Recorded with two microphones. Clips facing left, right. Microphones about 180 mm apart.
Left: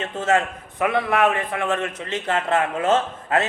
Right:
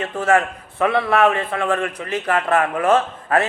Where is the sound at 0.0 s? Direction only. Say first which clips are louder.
Right 3 dB; 25° left (ahead or behind).